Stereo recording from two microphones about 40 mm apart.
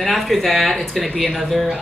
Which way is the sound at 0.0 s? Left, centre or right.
Centre.